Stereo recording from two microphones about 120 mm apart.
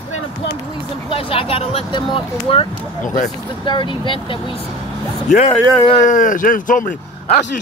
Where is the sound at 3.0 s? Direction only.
90° left.